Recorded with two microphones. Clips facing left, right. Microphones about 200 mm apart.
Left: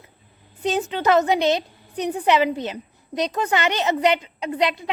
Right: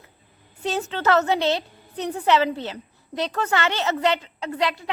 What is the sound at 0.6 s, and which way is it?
A woman's voice, 15° left (ahead or behind).